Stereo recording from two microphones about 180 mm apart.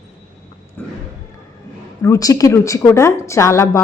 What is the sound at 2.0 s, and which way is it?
A woman's voice, 20° left (ahead or behind).